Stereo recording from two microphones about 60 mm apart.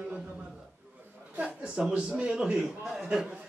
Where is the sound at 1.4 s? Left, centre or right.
Centre.